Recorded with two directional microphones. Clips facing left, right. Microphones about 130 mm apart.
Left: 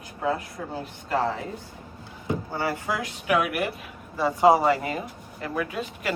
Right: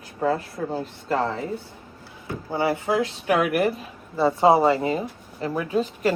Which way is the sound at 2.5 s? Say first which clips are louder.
Right 9 dB; 20° right (ahead or behind).